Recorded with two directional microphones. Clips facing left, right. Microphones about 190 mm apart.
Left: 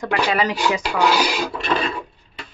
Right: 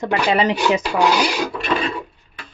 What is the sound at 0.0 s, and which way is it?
Speech, 25° right (ahead or behind).